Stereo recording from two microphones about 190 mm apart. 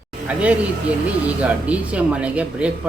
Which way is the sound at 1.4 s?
5° right (ahead or behind).